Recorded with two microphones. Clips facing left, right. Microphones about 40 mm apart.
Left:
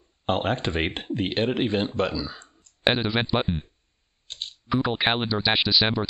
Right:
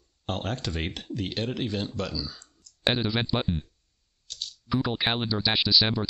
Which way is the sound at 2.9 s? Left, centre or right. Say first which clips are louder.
Left 3 dB; left.